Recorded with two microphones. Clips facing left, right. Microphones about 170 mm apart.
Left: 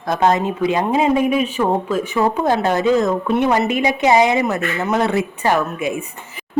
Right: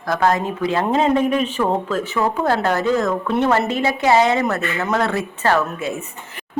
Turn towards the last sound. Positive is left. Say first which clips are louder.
# left 2 dB
turn(degrees=15)  # may be behind; listen again after turning